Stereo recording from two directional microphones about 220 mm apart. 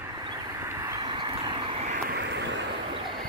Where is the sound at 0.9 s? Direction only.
20° right (ahead or behind).